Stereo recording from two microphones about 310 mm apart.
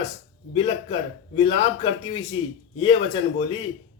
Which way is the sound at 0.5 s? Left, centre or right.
Centre.